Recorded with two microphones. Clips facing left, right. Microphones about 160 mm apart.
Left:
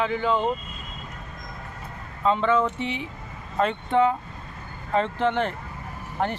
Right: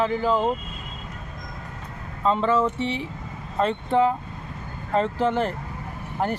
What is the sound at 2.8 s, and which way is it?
Speech, 35° right (ahead or behind).